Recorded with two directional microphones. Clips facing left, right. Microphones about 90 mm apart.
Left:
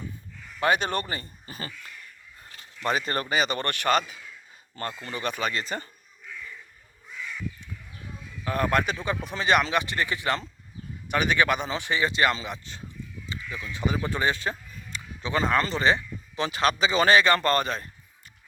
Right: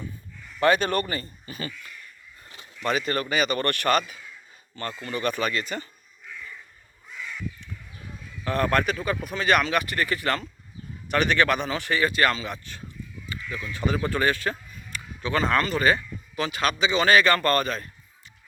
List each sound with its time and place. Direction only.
0.6 s speech: 15° left (ahead or behind)
1.5 s speech: 35° left (ahead or behind)
2.8 s speech: 35° left (ahead or behind)
8.4 s speech: 15° left (ahead or behind)
13.2 s crow: 20° left (ahead or behind)
13.7 s speech: 15° left (ahead or behind)
14.9 s a sound: 20° left (ahead or behind)
15.6 s speech: 25° left (ahead or behind)
17.2 s speech: 20° left (ahead or behind)